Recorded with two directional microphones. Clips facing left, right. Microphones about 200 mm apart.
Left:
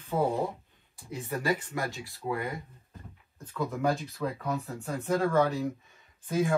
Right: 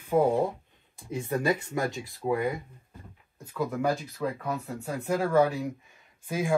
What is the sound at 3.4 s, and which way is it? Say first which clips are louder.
Speech: right 1 dB; centre (ahead or behind).